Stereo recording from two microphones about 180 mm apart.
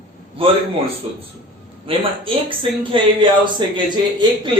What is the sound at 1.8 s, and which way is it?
Speech, 30° right (ahead or behind).